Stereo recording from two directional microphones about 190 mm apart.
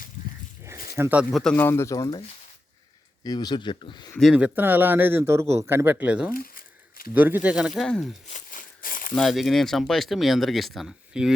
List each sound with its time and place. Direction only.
0.9 s speech: 10° right (ahead or behind)
1.5 s speech: 15° left (ahead or behind)
3.2 s speech: 20° left (ahead or behind)
4.1 s a man's voice: centre (ahead or behind)
6.3 s crumpling: 50° left (ahead or behind)
7.1 s speech: 10° right (ahead or behind)
8.3 s crumpling: 45° left (ahead or behind)
9.1 s speech: centre (ahead or behind)